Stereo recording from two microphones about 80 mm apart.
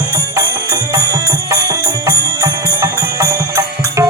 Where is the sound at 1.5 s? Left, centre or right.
Right.